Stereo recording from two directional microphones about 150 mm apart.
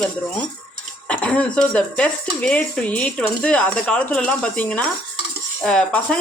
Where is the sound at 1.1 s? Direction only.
10° left (ahead or behind).